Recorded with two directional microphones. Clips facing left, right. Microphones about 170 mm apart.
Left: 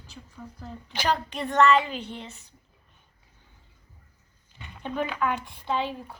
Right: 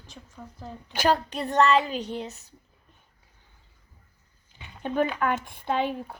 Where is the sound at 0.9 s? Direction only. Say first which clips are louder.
Right 3 dB; 45° right (ahead or behind).